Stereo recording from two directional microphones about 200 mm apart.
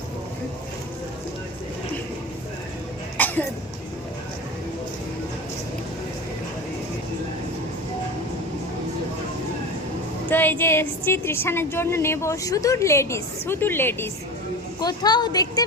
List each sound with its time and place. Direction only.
3.2 s cough: 10° left (ahead or behind)
10.2 s a woman's voice: 10° left (ahead or behind)